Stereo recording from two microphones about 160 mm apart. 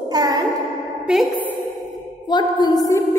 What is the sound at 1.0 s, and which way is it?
Speech, centre (ahead or behind).